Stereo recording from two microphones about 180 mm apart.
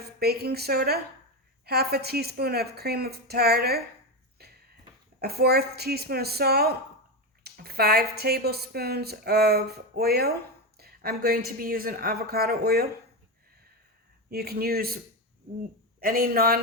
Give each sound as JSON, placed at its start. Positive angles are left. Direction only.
{"t": 0.2, "sound": "speech", "side_deg": -60}
{"t": 5.2, "sound": "speech", "side_deg": -60}
{"t": 14.3, "sound": "speech", "side_deg": -60}
{"t": 16.0, "sound": "a man's voice", "side_deg": -55}